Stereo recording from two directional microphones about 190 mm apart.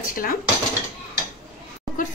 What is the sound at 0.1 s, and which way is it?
Speech, 45° left (ahead or behind).